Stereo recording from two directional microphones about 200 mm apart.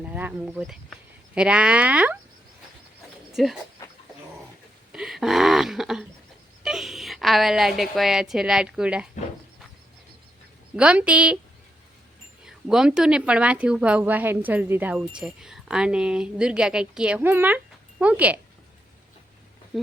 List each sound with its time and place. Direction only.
0.0 s a woman's voice: 5° right (ahead or behind)
3.3 s a woman's voice: centre (ahead or behind)
3.8 s dog: 15° left (ahead or behind)
4.9 s a woman's voice: 5° right (ahead or behind)
10.8 s a woman's voice: 5° right (ahead or behind)
12.5 s a woman's voice: 5° right (ahead or behind)
19.7 s a sound: centre (ahead or behind)